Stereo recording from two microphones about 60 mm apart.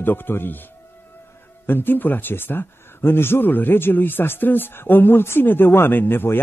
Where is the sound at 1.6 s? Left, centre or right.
Left.